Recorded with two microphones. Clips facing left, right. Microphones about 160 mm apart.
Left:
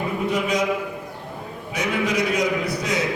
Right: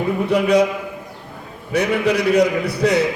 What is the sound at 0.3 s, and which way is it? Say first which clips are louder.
Speech: right 8 dB; 65° right (ahead or behind).